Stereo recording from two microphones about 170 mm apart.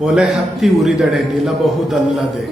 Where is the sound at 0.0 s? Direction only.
5° right (ahead or behind).